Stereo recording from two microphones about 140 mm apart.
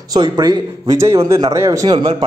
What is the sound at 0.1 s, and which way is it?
A man's voice, 30° right (ahead or behind).